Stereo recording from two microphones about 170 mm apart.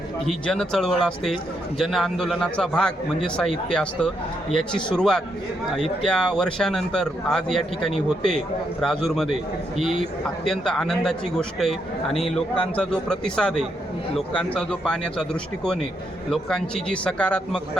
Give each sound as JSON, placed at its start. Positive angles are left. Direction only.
{"t": 0.3, "sound": "a man's voice", "side_deg": 5}